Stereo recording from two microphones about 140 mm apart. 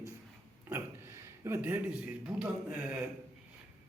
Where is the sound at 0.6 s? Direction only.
15° right (ahead or behind).